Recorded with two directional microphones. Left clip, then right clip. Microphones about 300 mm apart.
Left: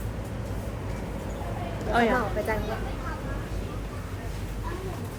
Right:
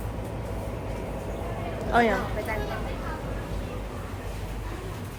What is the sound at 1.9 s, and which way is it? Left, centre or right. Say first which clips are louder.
Speech: right 1 dB; centre.